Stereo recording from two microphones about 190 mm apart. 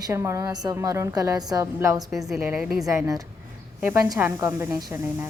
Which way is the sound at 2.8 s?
15° right (ahead or behind).